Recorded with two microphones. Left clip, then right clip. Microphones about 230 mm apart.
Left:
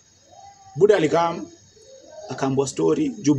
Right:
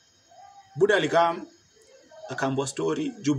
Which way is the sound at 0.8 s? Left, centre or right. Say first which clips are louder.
Left 4 dB; right.